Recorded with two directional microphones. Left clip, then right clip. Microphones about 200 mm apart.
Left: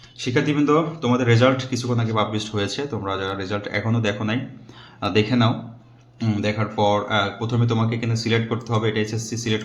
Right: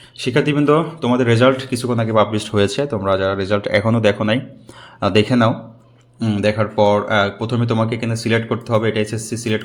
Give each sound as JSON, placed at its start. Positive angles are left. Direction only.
{"t": 0.2, "sound": "speech", "side_deg": -35}